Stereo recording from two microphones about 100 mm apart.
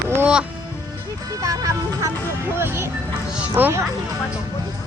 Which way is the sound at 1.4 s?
35° right (ahead or behind).